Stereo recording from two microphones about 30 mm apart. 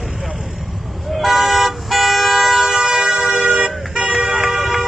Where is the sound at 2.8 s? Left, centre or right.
Right.